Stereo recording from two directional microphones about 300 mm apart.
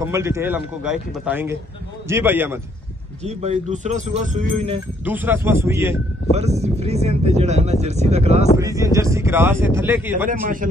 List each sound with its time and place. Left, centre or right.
0.0 s speech: centre
3.3 s speech: right
5.0 s speech: centre
6.3 s speech: right
8.5 s speech: centre
10.2 s speech: right